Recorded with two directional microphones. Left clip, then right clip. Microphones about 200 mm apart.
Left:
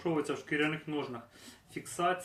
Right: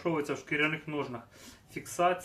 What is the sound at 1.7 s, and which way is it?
Speech, 15° right (ahead or behind).